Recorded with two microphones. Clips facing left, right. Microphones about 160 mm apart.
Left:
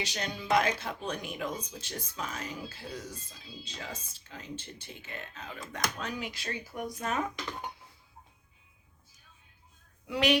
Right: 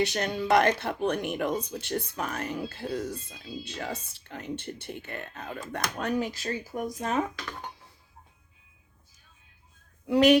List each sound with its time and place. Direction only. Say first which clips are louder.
0.0 s speech: right 9 dB; 60° right (ahead or behind); by 6.8 s 40° right (ahead or behind)
7.3 s speech: even; 15° left (ahead or behind)
10.1 s speech: right 8 dB; 45° right (ahead or behind)